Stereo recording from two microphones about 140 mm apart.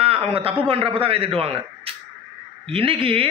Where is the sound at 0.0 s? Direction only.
45° right (ahead or behind).